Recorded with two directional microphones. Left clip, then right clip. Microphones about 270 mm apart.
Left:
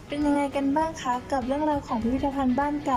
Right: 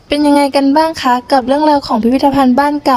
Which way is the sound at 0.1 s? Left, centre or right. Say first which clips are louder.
Right 15 dB; right.